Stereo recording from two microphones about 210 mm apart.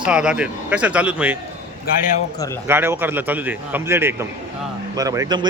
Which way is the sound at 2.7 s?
10° right (ahead or behind).